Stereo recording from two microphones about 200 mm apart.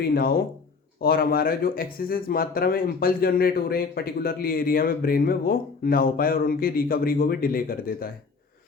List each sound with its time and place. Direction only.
0.0 s speech: 50° left (ahead or behind)